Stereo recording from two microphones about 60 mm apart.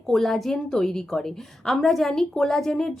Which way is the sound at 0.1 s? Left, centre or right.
Centre.